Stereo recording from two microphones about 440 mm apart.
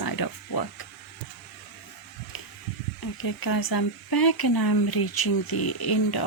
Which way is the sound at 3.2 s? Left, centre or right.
Left.